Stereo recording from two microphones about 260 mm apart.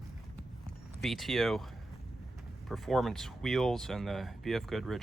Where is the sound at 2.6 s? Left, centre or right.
Centre.